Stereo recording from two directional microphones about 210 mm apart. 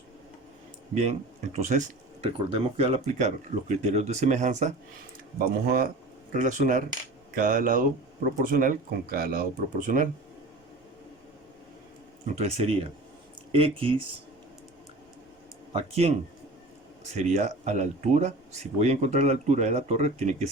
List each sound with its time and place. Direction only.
1.5 s speech: 30° right (ahead or behind)
5.6 s speech: 45° right (ahead or behind)
12.3 s speech: 30° right (ahead or behind)
15.7 s speech: 30° right (ahead or behind)
17.2 s speech: 35° right (ahead or behind)